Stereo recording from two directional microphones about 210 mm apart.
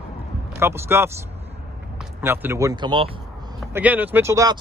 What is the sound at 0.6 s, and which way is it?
Speech, 10° right (ahead or behind).